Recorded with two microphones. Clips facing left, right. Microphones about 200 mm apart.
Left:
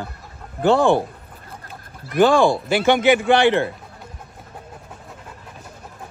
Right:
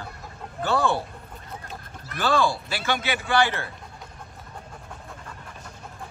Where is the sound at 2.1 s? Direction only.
55° left (ahead or behind).